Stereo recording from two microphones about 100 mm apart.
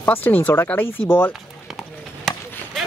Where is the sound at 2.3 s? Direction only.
5° left (ahead or behind).